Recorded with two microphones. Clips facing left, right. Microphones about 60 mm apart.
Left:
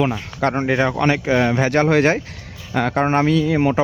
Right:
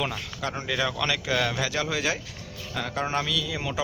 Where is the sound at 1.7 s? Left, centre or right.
Left.